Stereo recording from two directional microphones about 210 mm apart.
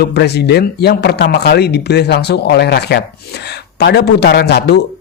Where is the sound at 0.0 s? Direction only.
50° left (ahead or behind).